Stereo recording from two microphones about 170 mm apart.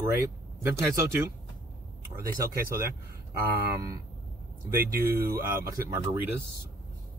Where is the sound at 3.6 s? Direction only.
60° right (ahead or behind).